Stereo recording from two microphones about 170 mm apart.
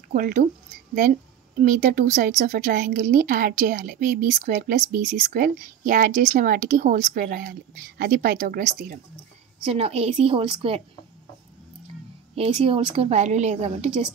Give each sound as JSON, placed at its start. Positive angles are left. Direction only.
{"t": 0.1, "sound": "a woman's voice", "side_deg": -50}
{"t": 1.6, "sound": "a woman's voice", "side_deg": -50}
{"t": 9.7, "sound": "a woman's voice", "side_deg": -35}
{"t": 12.4, "sound": "a woman's voice", "side_deg": -35}